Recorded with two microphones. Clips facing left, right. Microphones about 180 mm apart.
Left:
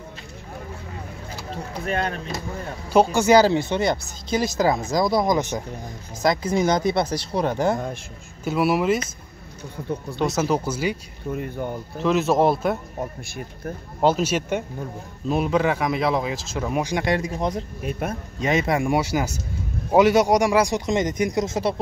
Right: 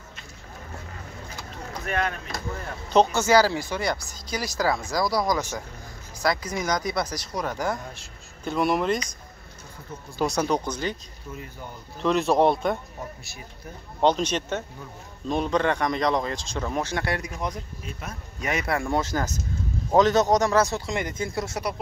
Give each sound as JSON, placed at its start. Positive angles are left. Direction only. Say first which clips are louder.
{"t": 1.7, "sound": "vehicle", "louder": "left 2 dB", "side_deg": 30}
{"t": 2.9, "sound": "speech", "louder": "left 3 dB", "side_deg": 10}
{"t": 8.5, "sound": "speech", "louder": "left 3 dB", "side_deg": 5}
{"t": 10.1, "sound": "speech", "louder": "left 1 dB", "side_deg": 0}
{"t": 12.0, "sound": "speech", "louder": "left 1 dB", "side_deg": 0}
{"t": 13.2, "sound": "speech", "louder": "left 9 dB", "side_deg": 50}
{"t": 14.0, "sound": "speech", "louder": "left 2 dB", "side_deg": 5}
{"t": 17.3, "sound": "speech", "louder": "left 6 dB", "side_deg": 30}
{"t": 17.8, "sound": "speech", "louder": "left 12 dB", "side_deg": 60}
{"t": 18.4, "sound": "speech", "louder": "left 5 dB", "side_deg": 25}